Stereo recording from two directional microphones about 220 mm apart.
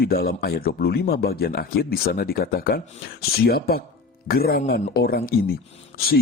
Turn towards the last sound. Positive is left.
turn(degrees=40)  # may be behind; listen again after turning